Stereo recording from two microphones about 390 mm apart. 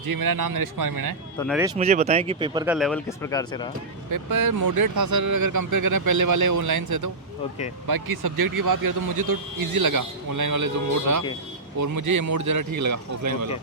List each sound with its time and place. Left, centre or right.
0.0 s speech: right
1.4 s speech: centre
1.8 s speech: centre
4.1 s speech: right